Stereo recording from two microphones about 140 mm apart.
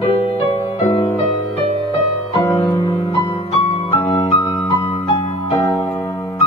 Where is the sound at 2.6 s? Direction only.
30° left (ahead or behind).